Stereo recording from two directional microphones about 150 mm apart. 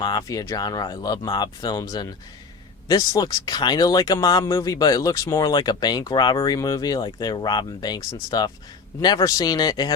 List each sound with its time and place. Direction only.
0.0 s speech: 25° left (ahead or behind)